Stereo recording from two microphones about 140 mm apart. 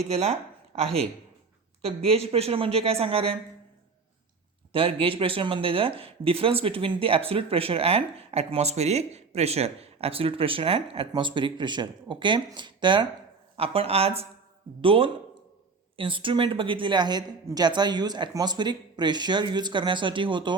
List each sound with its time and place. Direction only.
0.0 s speech: 50° right (ahead or behind)
4.7 s speech: 40° right (ahead or behind)
13.6 s speech: 45° right (ahead or behind)